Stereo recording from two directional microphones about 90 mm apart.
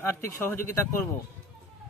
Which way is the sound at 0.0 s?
25° left (ahead or behind).